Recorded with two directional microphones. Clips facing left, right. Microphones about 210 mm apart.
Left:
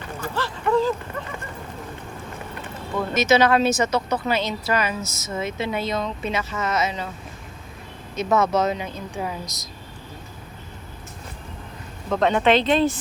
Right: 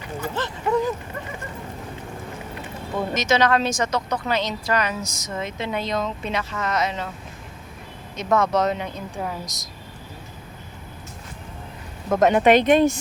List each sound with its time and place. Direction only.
0.2 s a sound: 20° right (ahead or behind)
3.2 s speech: 10° left (ahead or behind)
8.1 s speech: 5° left (ahead or behind)
12.0 s speech: 10° right (ahead or behind)